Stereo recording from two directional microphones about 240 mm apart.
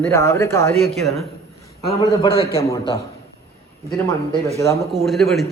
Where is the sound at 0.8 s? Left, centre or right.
Centre.